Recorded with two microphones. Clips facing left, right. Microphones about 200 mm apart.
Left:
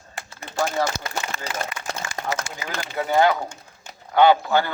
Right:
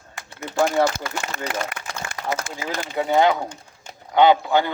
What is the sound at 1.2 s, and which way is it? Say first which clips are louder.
A man's voice: right 3 dB; 55° right (ahead or behind).